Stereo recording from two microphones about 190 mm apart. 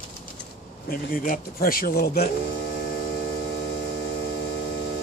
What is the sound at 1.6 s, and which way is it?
Speech, 50° left (ahead or behind).